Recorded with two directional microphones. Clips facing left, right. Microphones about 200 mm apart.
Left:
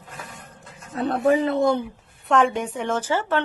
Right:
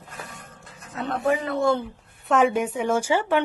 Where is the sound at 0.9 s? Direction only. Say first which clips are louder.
Left 4 dB; 35° left (ahead or behind).